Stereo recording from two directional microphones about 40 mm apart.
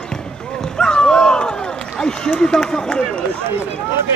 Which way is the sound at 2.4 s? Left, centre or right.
Centre.